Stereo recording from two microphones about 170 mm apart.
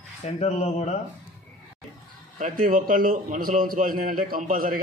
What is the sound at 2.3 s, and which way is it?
A man's voice, 55° right (ahead or behind).